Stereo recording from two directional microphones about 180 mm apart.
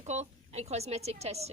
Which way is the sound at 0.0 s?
40° right (ahead or behind).